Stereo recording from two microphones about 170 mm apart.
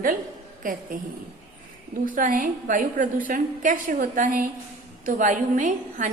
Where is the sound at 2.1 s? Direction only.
50° right (ahead or behind).